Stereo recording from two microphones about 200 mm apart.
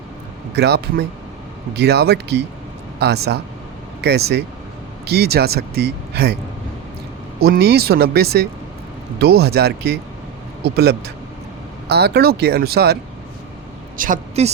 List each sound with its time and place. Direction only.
0.5 s speech: 55° right (ahead or behind)
7.3 s speech: 50° right (ahead or behind)
13.9 s a woman's voice: 40° right (ahead or behind)